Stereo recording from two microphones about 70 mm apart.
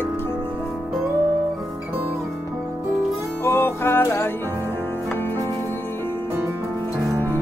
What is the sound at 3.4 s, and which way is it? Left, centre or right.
Music, left.